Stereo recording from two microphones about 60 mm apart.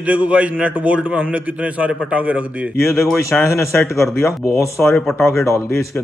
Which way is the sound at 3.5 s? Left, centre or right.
Left.